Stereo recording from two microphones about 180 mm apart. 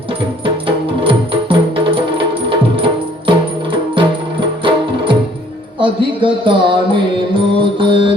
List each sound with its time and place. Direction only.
1.0 s music: 30° right (ahead or behind)